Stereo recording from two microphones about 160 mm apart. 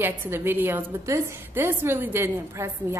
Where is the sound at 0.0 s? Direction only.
15° right (ahead or behind).